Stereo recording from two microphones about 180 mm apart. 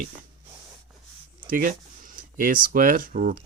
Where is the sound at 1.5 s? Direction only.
50° right (ahead or behind).